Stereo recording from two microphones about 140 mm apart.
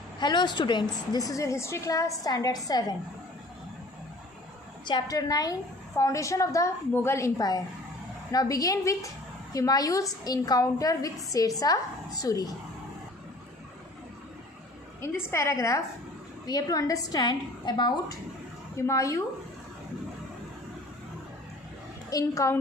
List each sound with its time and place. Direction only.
0.2 s a woman's voice: 30° left (ahead or behind)
4.9 s a woman's voice: 30° left (ahead or behind)
15.0 s a woman's voice: 20° left (ahead or behind)
22.1 s a woman's voice: 20° left (ahead or behind)